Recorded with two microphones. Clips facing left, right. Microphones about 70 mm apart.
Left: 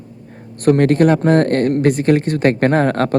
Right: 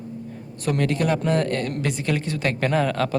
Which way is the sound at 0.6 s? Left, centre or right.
Left.